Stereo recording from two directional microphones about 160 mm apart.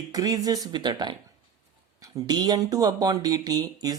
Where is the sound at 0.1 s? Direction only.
20° right (ahead or behind).